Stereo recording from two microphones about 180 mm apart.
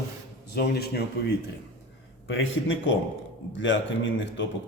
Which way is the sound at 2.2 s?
90° left.